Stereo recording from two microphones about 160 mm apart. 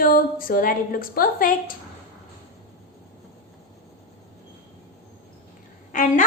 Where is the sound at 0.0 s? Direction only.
65° left (ahead or behind).